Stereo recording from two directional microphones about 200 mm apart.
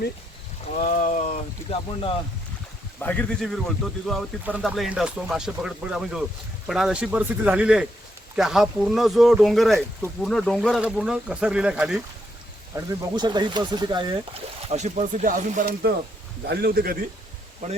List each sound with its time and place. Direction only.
0.8 s speech: 40° left (ahead or behind)
3.0 s speech: 10° left (ahead or behind)
12.7 s speech: 20° right (ahead or behind)
14.7 s speech: 35° right (ahead or behind)